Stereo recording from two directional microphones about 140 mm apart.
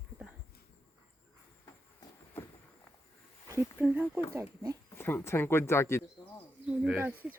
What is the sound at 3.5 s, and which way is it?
Speech, 20° right (ahead or behind).